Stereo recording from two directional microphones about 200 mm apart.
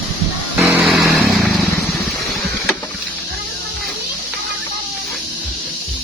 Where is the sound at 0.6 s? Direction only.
5° right (ahead or behind).